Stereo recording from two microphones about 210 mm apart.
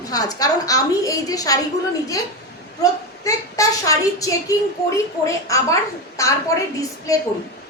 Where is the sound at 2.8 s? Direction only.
15° left (ahead or behind).